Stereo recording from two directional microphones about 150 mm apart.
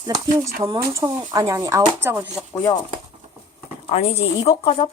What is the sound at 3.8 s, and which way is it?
Speech, 45° left (ahead or behind).